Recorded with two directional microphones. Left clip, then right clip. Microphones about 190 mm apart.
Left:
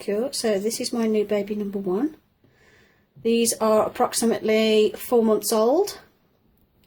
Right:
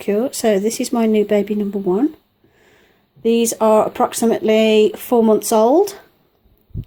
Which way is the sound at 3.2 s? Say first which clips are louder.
Right 6 dB; 30° right (ahead or behind).